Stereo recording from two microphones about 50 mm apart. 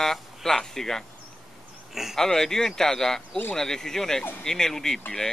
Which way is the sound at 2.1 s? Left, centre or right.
Centre.